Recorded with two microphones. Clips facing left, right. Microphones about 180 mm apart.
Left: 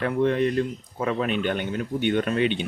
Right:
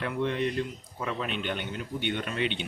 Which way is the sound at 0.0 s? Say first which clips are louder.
Left 7 dB; 45° left (ahead or behind).